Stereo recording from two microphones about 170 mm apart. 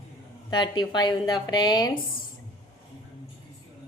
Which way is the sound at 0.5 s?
25° left (ahead or behind).